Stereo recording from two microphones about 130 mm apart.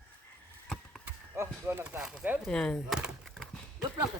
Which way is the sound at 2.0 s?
5° right (ahead or behind).